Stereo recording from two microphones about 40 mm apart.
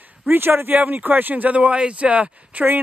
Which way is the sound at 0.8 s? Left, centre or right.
Right.